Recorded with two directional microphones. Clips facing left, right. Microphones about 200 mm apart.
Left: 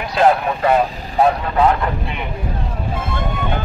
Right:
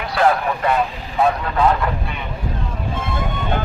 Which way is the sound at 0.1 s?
25° left (ahead or behind).